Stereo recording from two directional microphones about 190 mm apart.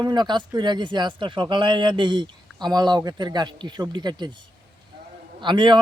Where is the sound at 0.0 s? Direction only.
25° right (ahead or behind).